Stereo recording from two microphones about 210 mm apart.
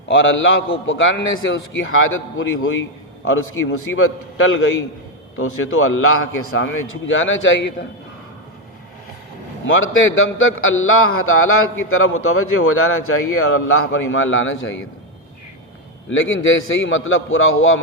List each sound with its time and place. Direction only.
0.1 s a man's voice: 65° left (ahead or behind)
9.6 s a man's voice: 70° left (ahead or behind)
16.0 s a man's voice: 70° left (ahead or behind)